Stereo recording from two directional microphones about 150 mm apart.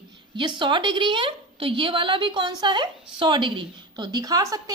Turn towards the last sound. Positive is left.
turn(degrees=-25)  # may be behind; listen again after turning